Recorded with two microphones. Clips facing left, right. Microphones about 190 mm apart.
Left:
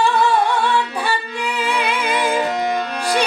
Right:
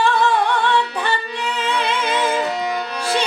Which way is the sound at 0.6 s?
10° left (ahead or behind).